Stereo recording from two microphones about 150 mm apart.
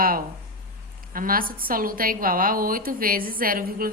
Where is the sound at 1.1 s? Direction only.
70° right (ahead or behind).